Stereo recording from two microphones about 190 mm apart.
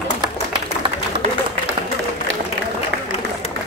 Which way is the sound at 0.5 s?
25° right (ahead or behind).